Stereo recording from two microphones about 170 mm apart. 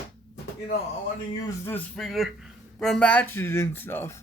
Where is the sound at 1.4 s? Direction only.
10° left (ahead or behind).